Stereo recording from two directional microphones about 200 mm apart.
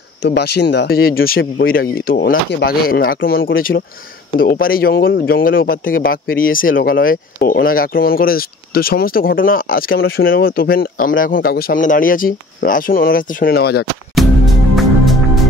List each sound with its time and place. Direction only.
0.2 s speech: 55° left (ahead or behind)
14.1 s music: centre (ahead or behind)